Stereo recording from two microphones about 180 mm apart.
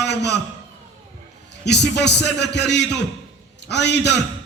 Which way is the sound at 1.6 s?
70° left (ahead or behind).